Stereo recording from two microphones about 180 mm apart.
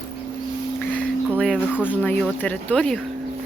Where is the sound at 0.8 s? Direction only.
10° left (ahead or behind).